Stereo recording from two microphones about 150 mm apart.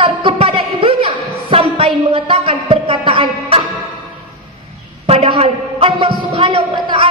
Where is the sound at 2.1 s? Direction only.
40° right (ahead or behind).